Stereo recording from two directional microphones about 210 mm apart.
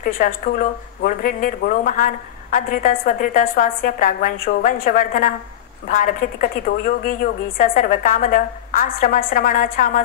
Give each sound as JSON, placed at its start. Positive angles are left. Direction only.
{"t": 0.0, "sound": "speech", "side_deg": 40}